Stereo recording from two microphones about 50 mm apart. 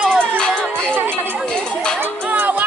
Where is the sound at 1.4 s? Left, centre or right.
Centre.